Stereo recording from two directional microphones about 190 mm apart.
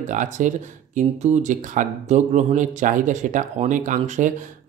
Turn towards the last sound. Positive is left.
turn(degrees=-40)  # may be behind; listen again after turning